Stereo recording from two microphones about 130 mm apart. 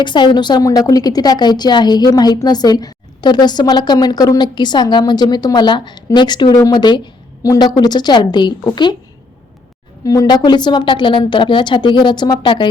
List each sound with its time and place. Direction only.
0.0 s a woman's voice: 35° left (ahead or behind)
10.0 s a woman's voice: 25° left (ahead or behind)